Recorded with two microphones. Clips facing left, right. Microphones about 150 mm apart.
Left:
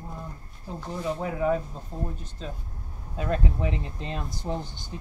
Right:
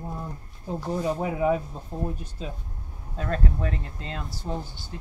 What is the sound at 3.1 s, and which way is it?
Speech, 10° left (ahead or behind).